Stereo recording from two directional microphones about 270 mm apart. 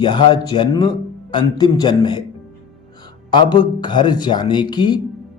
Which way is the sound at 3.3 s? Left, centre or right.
Centre.